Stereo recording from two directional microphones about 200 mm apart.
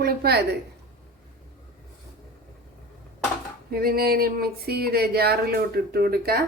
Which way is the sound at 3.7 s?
50° right (ahead or behind).